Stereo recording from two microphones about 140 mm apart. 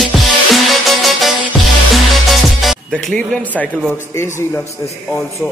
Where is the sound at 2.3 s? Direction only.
Centre (ahead or behind).